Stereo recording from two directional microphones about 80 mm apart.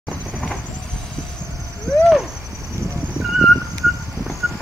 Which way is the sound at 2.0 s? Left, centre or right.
Centre.